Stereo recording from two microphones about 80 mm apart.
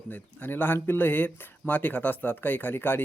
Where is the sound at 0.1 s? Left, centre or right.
Left.